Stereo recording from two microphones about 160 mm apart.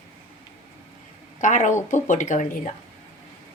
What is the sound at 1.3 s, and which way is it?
A woman's voice, 50° left (ahead or behind).